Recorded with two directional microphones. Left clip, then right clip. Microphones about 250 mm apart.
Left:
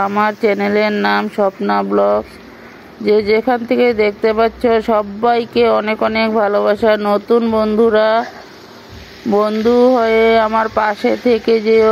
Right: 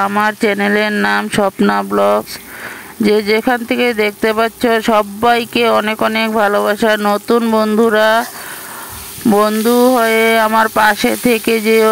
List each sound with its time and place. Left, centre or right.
0.0 s speech: right
9.3 s speech: right